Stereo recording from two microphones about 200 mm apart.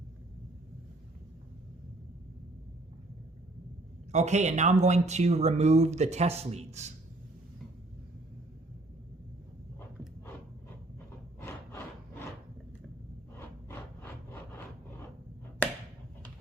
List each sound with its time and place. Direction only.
4.1 s speech: 35° right (ahead or behind)